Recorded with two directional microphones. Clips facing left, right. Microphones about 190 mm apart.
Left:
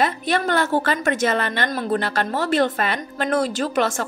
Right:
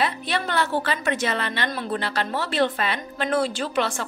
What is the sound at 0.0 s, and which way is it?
A woman's voice, 45° left (ahead or behind).